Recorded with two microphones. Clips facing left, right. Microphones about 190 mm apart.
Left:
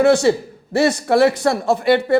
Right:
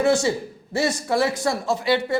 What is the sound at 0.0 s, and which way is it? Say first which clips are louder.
A man's voice: left 6 dB; 65° left (ahead or behind).